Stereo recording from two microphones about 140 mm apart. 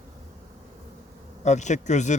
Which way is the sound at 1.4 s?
55° left (ahead or behind).